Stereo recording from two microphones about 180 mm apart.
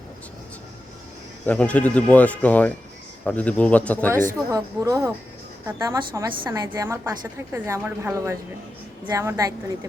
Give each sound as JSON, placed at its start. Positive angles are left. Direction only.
{"t": 1.5, "sound": "speech", "side_deg": 5}
{"t": 4.5, "sound": "a woman's voice", "side_deg": -15}